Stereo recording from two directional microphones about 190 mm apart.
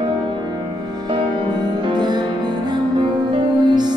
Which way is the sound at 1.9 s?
20° right (ahead or behind).